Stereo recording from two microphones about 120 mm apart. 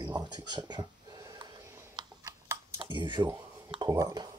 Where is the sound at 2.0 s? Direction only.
40° right (ahead or behind).